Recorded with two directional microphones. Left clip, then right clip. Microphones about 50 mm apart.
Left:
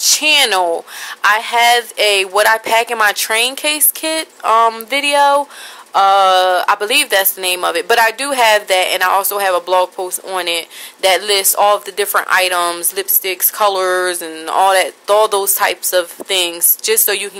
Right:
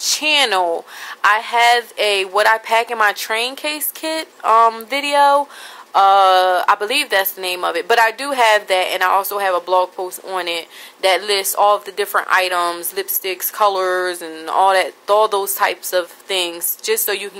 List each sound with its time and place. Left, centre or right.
0.0 s speech: centre